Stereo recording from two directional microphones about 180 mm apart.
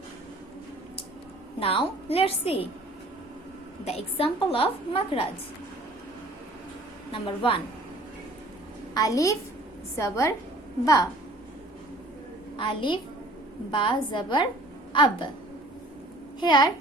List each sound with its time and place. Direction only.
1.5 s a woman's voice: 30° left (ahead or behind)
3.8 s a woman's voice: 35° left (ahead or behind)
7.1 s a woman's voice: 30° left (ahead or behind)
9.0 s a woman's voice: 20° left (ahead or behind)
12.5 s a woman's voice: 25° left (ahead or behind)
16.4 s a woman's voice: 25° left (ahead or behind)